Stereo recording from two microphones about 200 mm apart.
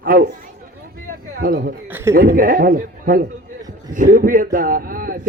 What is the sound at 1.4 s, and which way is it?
Speech, 50° right (ahead or behind).